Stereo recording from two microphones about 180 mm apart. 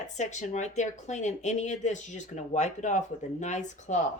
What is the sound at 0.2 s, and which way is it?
Speech, 40° left (ahead or behind).